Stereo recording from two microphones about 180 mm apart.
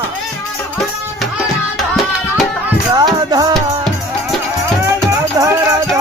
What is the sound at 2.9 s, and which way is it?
Music, 20° right (ahead or behind).